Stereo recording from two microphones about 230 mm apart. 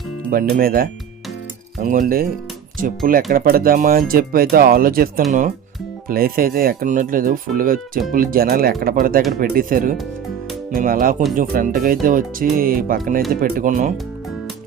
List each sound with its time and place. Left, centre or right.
0.5 s speech: right
1.9 s speech: right